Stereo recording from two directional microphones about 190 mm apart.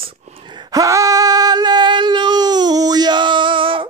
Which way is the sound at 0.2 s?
30° right (ahead or behind).